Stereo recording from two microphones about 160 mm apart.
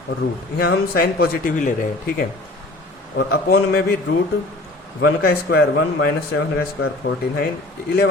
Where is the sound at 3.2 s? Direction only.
70° left (ahead or behind).